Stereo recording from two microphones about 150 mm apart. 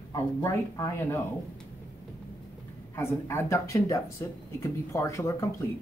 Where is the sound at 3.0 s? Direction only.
15° left (ahead or behind).